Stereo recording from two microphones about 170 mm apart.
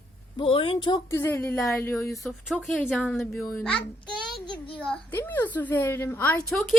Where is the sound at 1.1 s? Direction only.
15° left (ahead or behind).